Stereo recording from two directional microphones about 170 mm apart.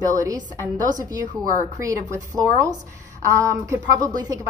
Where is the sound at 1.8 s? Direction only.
20° right (ahead or behind).